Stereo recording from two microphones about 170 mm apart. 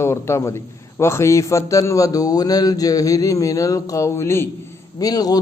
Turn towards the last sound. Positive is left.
turn(degrees=20)  # may be behind; listen again after turning